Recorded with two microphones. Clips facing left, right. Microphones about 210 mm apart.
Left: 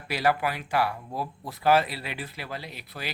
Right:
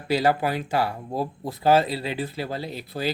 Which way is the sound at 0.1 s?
25° right (ahead or behind).